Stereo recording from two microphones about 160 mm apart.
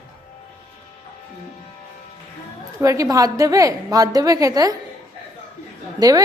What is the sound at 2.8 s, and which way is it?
A woman's voice, 20° right (ahead or behind).